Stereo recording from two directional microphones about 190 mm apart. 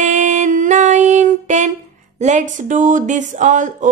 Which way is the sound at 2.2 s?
40° right (ahead or behind).